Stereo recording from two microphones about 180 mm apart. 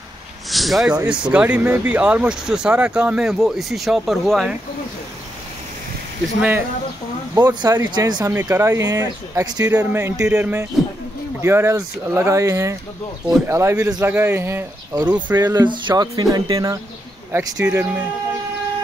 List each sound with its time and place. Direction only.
0.5 s speech: centre (ahead or behind)
7.3 s speech: 20° right (ahead or behind)
9.7 s speech: 10° right (ahead or behind)
15.5 s speech: 25° right (ahead or behind)